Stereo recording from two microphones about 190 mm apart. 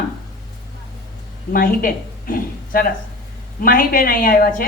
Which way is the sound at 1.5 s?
50° left (ahead or behind).